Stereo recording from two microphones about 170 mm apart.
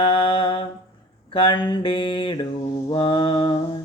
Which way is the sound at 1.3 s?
30° left (ahead or behind).